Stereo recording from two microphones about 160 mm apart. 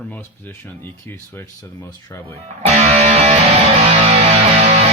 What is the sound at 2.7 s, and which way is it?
Music, 40° right (ahead or behind).